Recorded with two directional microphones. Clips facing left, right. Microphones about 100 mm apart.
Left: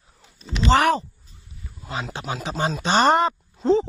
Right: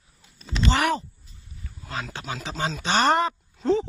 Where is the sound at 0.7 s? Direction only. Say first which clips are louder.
Left 5 dB; 40° left (ahead or behind).